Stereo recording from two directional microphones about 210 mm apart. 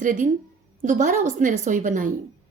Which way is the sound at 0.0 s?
40° right (ahead or behind).